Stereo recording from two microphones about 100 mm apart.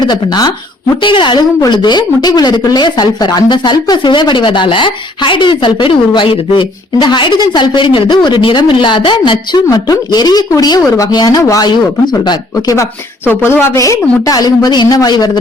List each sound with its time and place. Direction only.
0.0 s a woman's voice: 45° left (ahead or behind)
11.7 s a woman's voice: 45° left (ahead or behind)
12.7 s speech: 25° left (ahead or behind)
13.8 s a woman's voice: 35° left (ahead or behind)